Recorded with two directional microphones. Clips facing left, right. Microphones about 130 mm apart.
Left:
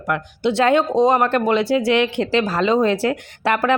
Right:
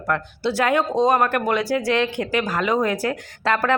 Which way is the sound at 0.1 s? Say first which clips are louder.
Left 3 dB; 20° left (ahead or behind).